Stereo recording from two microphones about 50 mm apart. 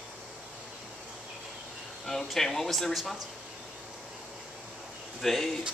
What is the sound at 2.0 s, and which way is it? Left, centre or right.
Speech, centre.